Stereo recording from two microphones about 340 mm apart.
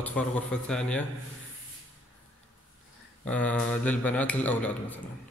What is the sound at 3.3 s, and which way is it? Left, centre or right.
A man's voice, centre.